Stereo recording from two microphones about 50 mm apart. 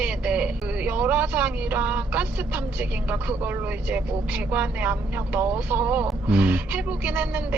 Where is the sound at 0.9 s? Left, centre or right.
Right.